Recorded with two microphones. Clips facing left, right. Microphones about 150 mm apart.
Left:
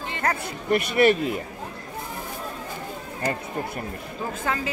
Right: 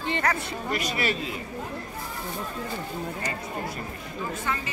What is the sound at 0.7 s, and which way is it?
Speech, 55° left (ahead or behind).